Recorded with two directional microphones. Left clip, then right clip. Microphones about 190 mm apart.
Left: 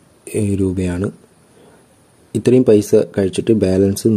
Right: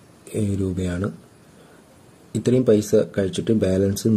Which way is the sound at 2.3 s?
30° left (ahead or behind).